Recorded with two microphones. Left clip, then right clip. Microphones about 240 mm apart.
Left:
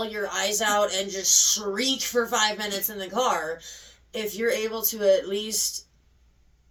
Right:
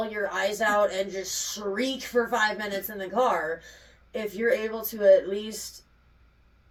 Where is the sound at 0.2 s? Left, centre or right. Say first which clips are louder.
Even; left.